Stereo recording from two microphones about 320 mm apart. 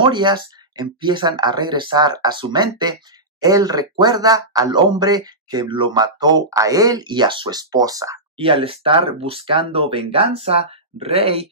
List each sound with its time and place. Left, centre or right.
0.0 s speech: centre